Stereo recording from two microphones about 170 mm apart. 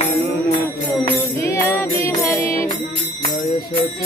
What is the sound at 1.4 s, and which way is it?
Music, 15° left (ahead or behind).